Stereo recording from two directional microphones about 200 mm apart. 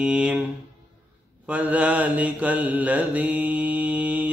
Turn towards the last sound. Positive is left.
turn(degrees=-5)  # may be behind; listen again after turning